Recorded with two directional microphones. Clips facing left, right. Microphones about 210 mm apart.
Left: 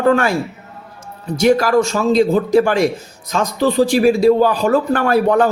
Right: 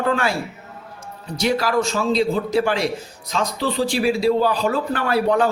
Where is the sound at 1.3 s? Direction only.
45° left (ahead or behind).